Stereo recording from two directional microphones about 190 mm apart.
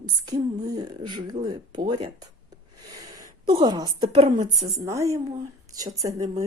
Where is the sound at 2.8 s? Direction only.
20° right (ahead or behind).